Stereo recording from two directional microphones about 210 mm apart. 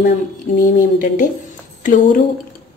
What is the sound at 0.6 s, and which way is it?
Speech, 40° left (ahead or behind).